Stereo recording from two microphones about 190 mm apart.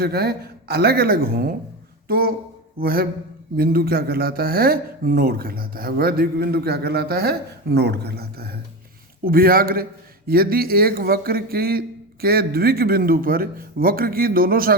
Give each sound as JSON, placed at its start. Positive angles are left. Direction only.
{"t": 0.0, "sound": "speech", "side_deg": -55}